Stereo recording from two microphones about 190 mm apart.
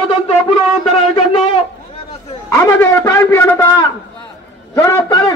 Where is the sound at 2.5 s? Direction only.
15° left (ahead or behind).